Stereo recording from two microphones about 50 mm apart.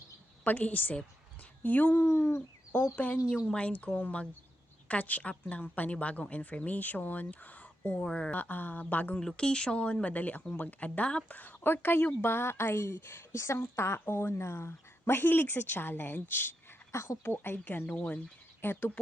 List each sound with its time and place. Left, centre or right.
0.4 s a woman's voice: left
2.0 s speech: left
2.9 s a woman's voice: left
8.0 s a woman's voice: centre
8.3 s speech: left
9.2 s a woman's voice: centre
11.3 s a woman's voice: left
16.9 s speech: left
17.2 s a woman's voice: left
17.9 s a woman's voice: left
18.6 s a woman's voice: left